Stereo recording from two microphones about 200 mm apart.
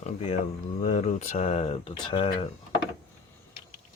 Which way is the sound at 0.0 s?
35° left (ahead or behind).